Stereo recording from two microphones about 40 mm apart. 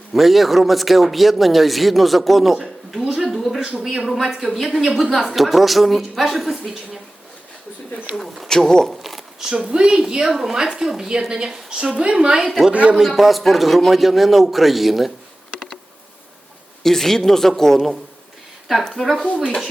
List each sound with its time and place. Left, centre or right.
0.1 s a man's voice: centre
3.3 s a sound: centre
3.8 s a man's voice: centre
8.4 s speech: centre
8.9 s a sound: centre
9.4 s a woman's voice: centre
13.1 s a man's voice: centre
16.8 s speech: centre
19.2 s speech: left